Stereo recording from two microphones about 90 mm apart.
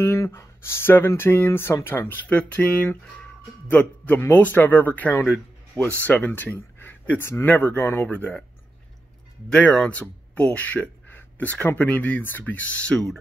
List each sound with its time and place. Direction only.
0.0 s speech: 30° left (ahead or behind)
9.5 s a man's voice: 10° left (ahead or behind)